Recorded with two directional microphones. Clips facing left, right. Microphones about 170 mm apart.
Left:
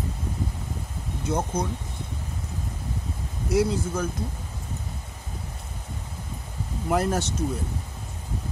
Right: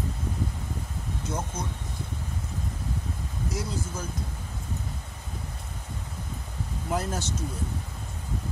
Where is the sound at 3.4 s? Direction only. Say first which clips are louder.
Left 11 dB; 60° left (ahead or behind).